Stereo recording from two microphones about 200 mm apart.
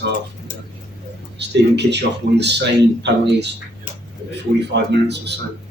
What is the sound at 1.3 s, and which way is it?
Speech, 60° right (ahead or behind).